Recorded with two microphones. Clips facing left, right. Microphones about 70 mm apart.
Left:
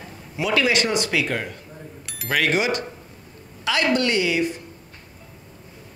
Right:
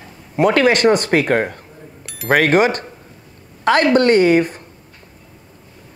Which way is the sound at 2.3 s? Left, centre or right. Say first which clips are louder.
Right 8 dB; right.